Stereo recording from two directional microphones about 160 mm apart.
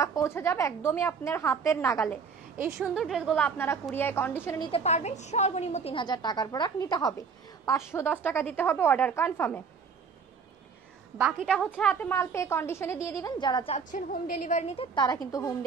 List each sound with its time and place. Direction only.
0.0 s a woman's voice: 20° left (ahead or behind)
2.5 s a woman's voice: 15° right (ahead or behind)
2.9 s a woman's voice: centre (ahead or behind)
4.6 s a woman's voice: 35° left (ahead or behind); by 9.6 s 15° left (ahead or behind)
11.5 s a woman's voice: 5° left (ahead or behind)
11.9 s a woman's voice: 15° left (ahead or behind)
13.7 s a woman's voice: 55° left (ahead or behind)
15.0 s a woman's voice: 25° left (ahead or behind)